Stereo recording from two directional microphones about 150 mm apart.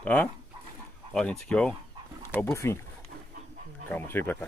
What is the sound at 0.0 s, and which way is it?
Speech, 10° left (ahead or behind).